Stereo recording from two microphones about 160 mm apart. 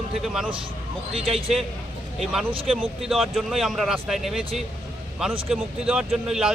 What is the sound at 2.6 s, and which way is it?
Speech, centre (ahead or behind).